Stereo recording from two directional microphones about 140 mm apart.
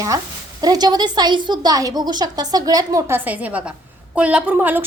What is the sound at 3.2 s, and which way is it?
A woman's voice, 10° right (ahead or behind).